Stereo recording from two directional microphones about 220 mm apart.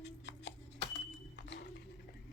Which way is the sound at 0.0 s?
55° left (ahead or behind).